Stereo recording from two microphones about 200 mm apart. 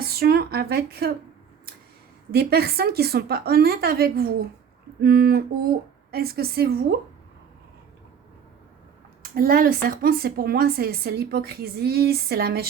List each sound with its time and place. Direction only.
0.0 s a sound: 50° right (ahead or behind)
2.3 s speech: 50° right (ahead or behind)
9.3 s speech: 45° right (ahead or behind)